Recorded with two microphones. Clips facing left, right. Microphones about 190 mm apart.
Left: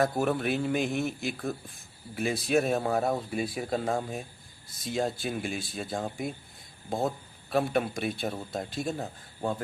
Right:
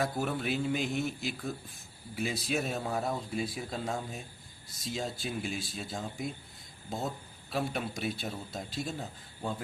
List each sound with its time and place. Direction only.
0.0 s a man's voice: 55° left (ahead or behind)